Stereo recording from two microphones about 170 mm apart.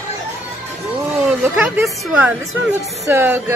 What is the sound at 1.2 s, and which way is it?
Speech, 10° right (ahead or behind).